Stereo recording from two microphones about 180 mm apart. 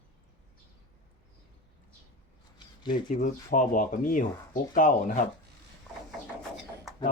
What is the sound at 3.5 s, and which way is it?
Speech, 50° left (ahead or behind).